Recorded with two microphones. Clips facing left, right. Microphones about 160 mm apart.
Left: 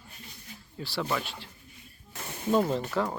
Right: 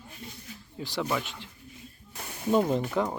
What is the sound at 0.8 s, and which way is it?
Rub, 15° right (ahead or behind).